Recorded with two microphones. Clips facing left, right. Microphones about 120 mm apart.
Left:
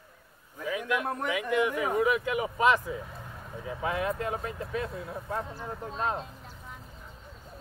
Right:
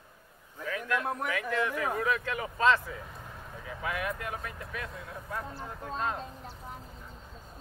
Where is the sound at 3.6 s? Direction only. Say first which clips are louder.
Left 4 dB; 25° left (ahead or behind).